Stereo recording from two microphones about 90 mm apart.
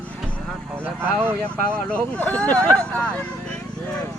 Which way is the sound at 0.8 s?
25° right (ahead or behind).